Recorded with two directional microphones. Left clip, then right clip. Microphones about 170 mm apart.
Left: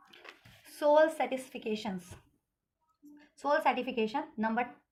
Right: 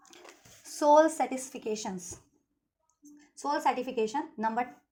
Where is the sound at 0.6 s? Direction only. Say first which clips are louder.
Right 3 dB; 25° right (ahead or behind).